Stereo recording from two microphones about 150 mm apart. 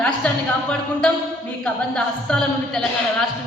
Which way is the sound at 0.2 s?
5° left (ahead or behind).